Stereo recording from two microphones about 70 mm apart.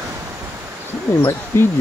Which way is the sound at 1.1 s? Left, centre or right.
Left.